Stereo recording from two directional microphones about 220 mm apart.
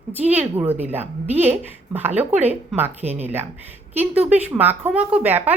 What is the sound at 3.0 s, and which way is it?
Speech, 30° right (ahead or behind).